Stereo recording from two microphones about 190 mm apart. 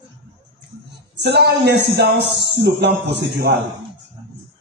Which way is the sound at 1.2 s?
60° right (ahead or behind).